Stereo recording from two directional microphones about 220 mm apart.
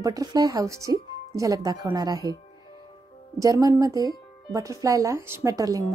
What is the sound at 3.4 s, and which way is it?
Speech, 15° right (ahead or behind).